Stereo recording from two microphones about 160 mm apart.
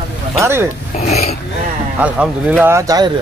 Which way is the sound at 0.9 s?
45° left (ahead or behind).